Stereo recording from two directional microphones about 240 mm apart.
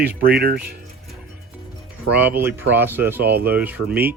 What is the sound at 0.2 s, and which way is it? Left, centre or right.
Speech, right.